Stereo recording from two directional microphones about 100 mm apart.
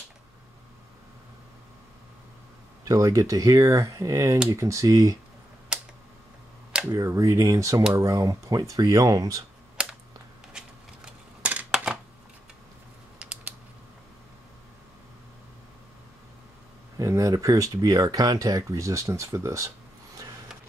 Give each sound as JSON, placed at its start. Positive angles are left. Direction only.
{"t": 2.8, "sound": "speech", "side_deg": -35}
{"t": 5.7, "sound": "typing", "side_deg": -10}
{"t": 6.9, "sound": "speech", "side_deg": -35}
{"t": 11.1, "sound": "a sound", "side_deg": -10}
{"t": 13.2, "sound": "typing", "side_deg": -15}
{"t": 17.0, "sound": "speech", "side_deg": -30}